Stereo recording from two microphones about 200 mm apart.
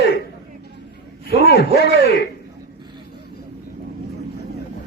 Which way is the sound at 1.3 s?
30° right (ahead or behind).